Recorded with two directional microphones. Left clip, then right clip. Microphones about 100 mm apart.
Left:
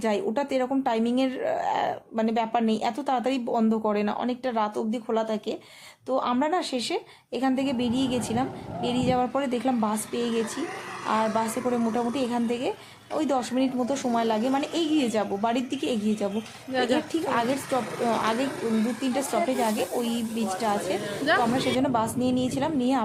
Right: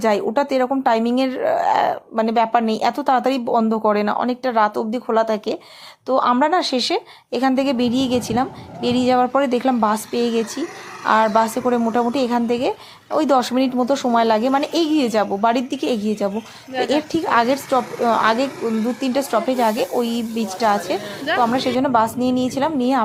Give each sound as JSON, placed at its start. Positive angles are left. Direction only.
{"t": 0.0, "sound": "a woman's voice", "side_deg": -30}